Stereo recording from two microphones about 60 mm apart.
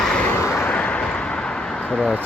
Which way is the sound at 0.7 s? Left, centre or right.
Left.